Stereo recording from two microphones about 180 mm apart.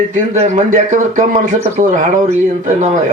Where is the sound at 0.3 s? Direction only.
40° right (ahead or behind).